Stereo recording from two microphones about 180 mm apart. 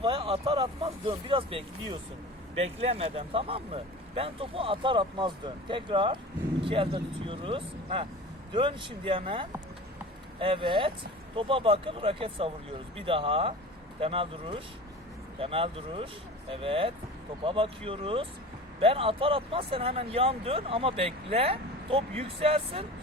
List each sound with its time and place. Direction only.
0.0 s speech: 30° right (ahead or behind)